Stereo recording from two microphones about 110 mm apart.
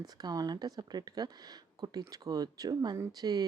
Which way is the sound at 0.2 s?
35° right (ahead or behind).